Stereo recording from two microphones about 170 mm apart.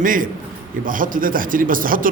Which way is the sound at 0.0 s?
55° right (ahead or behind).